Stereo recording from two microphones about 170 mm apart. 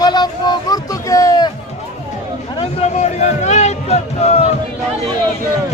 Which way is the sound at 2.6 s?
40° left (ahead or behind).